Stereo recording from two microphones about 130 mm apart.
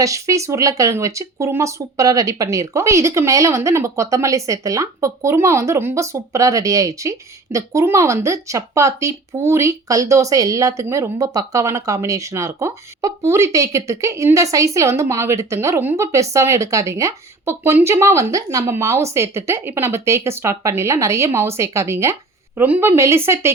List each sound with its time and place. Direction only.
0.0 s speech: 25° right (ahead or behind)